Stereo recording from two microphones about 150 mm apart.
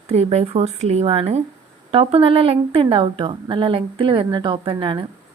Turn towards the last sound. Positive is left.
turn(degrees=-35)  # may be behind; listen again after turning